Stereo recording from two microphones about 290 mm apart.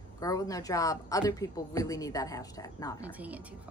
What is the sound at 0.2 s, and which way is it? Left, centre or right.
A woman's voice, centre.